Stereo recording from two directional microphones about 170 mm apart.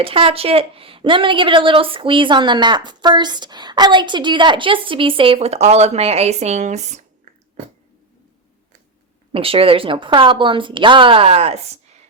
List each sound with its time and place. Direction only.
0.0 s a woman's voice: 35° right (ahead or behind)
9.3 s a woman's voice: 35° right (ahead or behind)